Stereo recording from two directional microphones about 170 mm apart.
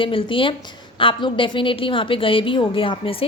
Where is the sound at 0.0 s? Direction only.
30° left (ahead or behind).